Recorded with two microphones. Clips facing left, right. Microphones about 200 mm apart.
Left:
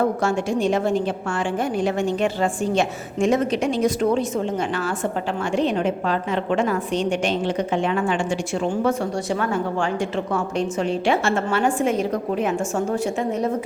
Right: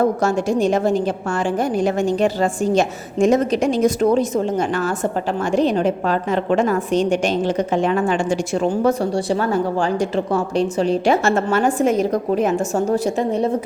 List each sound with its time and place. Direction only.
0.2 s a woman's voice: 40° right (ahead or behind)